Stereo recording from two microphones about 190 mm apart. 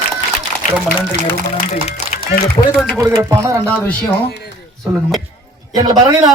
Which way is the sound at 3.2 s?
15° right (ahead or behind).